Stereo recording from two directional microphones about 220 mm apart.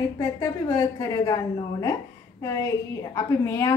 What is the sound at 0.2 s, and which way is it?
A woman's voice, 15° left (ahead or behind).